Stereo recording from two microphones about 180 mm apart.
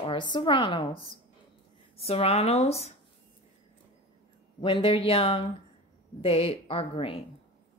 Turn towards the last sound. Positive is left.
turn(degrees=30)  # may be behind; listen again after turning